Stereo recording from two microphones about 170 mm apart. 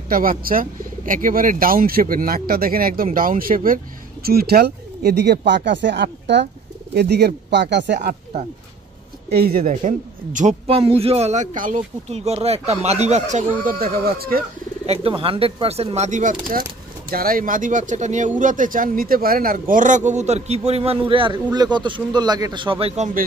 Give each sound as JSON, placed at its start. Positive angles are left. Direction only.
{"t": 0.1, "sound": "speech", "side_deg": -55}
{"t": 6.9, "sound": "speech", "side_deg": -75}
{"t": 7.5, "sound": "speech", "side_deg": -90}
{"t": 9.4, "sound": "a man's voice", "side_deg": -60}
{"t": 13.7, "sound": "speech", "side_deg": -60}
{"t": 14.9, "sound": "a man's voice", "side_deg": -35}
{"t": 17.1, "sound": "speech", "side_deg": -60}
{"t": 19.7, "sound": "a man's voice", "side_deg": -50}